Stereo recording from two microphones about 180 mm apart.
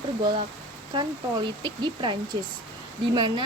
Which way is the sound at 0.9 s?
25° right (ahead or behind).